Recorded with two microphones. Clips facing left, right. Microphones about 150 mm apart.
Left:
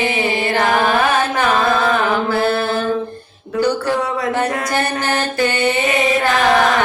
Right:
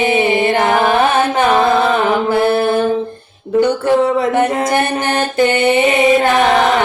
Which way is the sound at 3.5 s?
20° right (ahead or behind).